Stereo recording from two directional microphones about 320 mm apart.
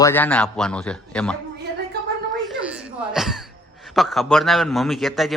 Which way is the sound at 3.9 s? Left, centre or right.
Centre.